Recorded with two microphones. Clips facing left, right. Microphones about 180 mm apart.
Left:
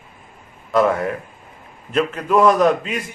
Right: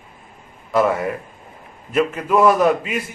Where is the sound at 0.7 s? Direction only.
5° right (ahead or behind).